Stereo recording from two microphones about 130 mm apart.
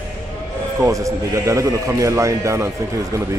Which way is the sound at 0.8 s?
25° right (ahead or behind).